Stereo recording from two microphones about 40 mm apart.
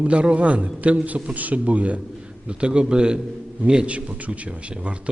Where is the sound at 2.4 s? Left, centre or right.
Right.